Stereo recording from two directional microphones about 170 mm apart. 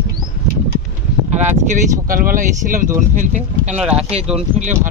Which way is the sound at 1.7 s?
55° right (ahead or behind).